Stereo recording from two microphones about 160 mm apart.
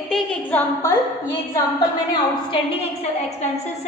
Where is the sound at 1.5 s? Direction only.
25° left (ahead or behind).